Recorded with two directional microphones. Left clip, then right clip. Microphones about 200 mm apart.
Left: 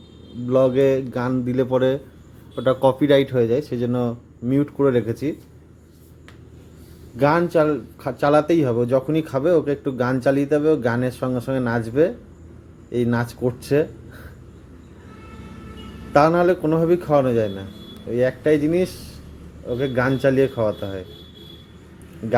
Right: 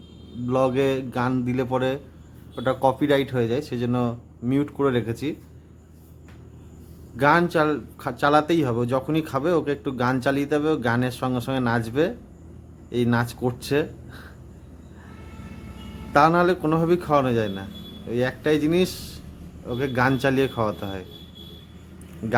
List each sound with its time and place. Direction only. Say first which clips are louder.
0.4 s speech: left 5 dB; 10° left (ahead or behind)
7.2 s speech: left 2 dB; 10° left (ahead or behind)
13.1 s speech: left 2 dB; 10° left (ahead or behind)
16.1 s speech: left 2 dB; 10° left (ahead or behind); by 19.1 s 5° right (ahead or behind)
19.6 s speech: left 1 dB; 5° left (ahead or behind)